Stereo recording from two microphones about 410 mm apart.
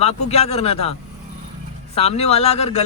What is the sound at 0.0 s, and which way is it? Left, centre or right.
Speech, centre.